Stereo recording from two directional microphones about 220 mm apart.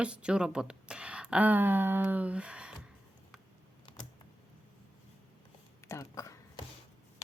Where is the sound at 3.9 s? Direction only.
25° left (ahead or behind).